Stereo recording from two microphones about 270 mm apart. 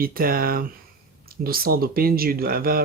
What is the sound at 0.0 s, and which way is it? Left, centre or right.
Speech, right.